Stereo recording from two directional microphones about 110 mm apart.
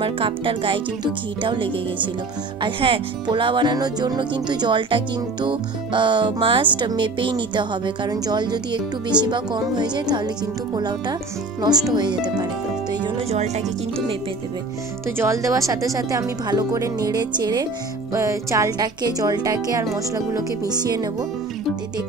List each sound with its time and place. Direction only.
0.0 s speech: 55° right (ahead or behind)
13.3 s speech: 80° right
15.0 s speech: 25° right (ahead or behind)
18.1 s speech: 25° right (ahead or behind)